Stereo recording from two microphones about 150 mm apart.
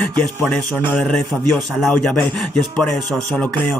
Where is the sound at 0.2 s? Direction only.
5° left (ahead or behind).